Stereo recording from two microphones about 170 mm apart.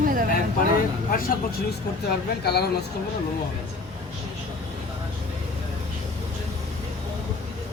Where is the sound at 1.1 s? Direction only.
55° left (ahead or behind).